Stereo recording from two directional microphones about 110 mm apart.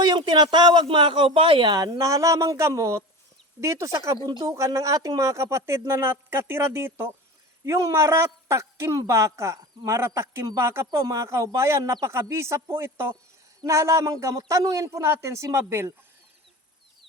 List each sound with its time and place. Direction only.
0.0 s speech: 40° right (ahead or behind)
1.7 s speech: 35° right (ahead or behind)